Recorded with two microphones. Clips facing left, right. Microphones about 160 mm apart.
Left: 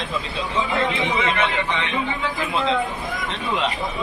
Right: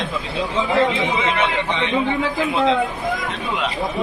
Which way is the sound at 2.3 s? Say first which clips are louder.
Right 4 dB; 20° right (ahead or behind).